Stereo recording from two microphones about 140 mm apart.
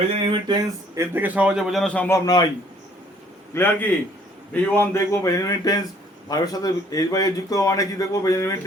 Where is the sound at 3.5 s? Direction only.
15° left (ahead or behind).